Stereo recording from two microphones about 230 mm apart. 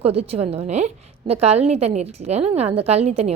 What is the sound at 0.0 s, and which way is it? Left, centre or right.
A woman's voice, right.